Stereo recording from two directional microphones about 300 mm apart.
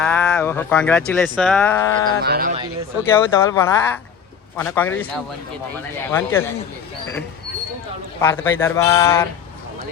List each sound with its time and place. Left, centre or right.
0.0 s speech: centre
2.2 s speech: right
3.1 s speech: centre
8.2 s speech: centre